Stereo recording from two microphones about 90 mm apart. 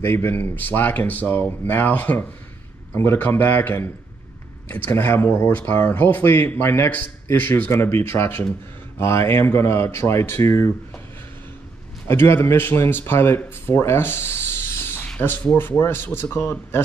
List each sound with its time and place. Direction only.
0.0 s speech: 25° left (ahead or behind)
7.7 s speech: 30° left (ahead or behind)
12.1 s speech: 25° left (ahead or behind)